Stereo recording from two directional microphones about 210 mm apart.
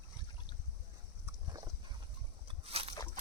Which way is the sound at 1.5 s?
15° right (ahead or behind).